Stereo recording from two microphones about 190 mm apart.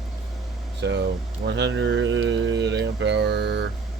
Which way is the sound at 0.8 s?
70° right (ahead or behind).